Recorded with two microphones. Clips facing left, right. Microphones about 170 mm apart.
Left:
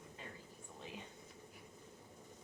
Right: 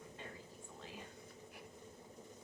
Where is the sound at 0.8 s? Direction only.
20° left (ahead or behind).